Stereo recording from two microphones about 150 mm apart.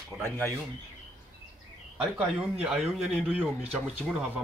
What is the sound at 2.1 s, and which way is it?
Speech, 10° right (ahead or behind).